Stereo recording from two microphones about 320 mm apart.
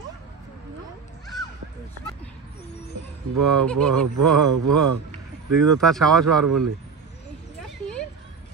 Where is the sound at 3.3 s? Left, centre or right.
Right.